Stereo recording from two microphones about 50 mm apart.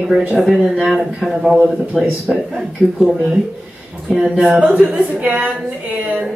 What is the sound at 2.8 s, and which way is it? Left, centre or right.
Speech, right.